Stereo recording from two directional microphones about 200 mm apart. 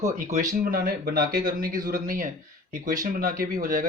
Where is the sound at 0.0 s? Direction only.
40° right (ahead or behind).